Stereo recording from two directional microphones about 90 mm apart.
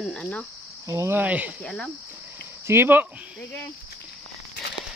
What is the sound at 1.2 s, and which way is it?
Speech, 15° right (ahead or behind).